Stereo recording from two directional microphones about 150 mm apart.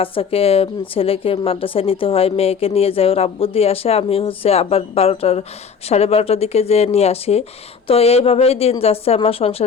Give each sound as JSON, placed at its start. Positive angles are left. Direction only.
{"t": 0.0, "sound": "speech", "side_deg": 40}